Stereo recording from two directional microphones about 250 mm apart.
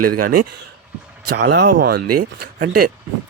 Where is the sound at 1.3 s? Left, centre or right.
Right.